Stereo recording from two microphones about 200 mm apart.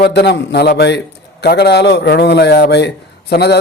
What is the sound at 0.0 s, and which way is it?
A man's voice, 55° left (ahead or behind).